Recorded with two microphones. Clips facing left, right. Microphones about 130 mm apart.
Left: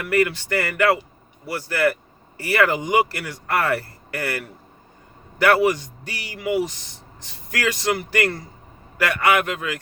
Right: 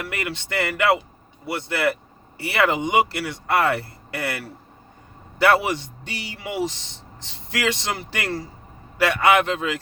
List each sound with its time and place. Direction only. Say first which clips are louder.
0.0 s speech: left 9 dB; 25° right (ahead or behind)